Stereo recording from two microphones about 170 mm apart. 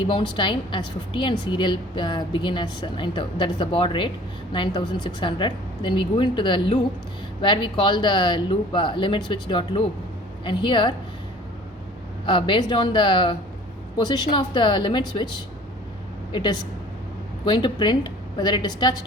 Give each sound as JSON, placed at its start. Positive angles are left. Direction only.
{"t": 0.1, "sound": "a woman's voice", "side_deg": 30}
{"t": 12.2, "sound": "a woman's voice", "side_deg": 30}